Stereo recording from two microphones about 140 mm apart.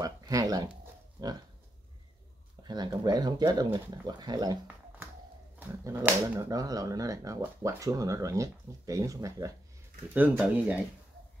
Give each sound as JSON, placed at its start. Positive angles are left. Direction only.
{"t": 0.0, "sound": "a sound", "side_deg": -25}
{"t": 2.6, "sound": "speech", "side_deg": -30}
{"t": 5.6, "sound": "speech", "side_deg": -15}
{"t": 6.5, "sound": "speech", "side_deg": -25}
{"t": 10.3, "sound": "speech", "side_deg": -5}